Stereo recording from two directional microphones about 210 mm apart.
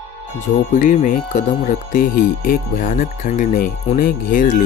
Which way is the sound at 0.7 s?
35° left (ahead or behind).